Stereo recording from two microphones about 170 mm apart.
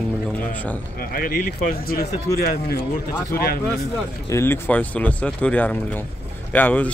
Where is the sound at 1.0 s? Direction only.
60° left (ahead or behind).